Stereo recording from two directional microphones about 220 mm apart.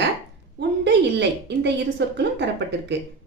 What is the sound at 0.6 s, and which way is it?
A woman's voice, 50° right (ahead or behind).